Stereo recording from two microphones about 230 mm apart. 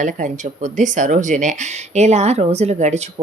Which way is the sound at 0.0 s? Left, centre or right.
Right.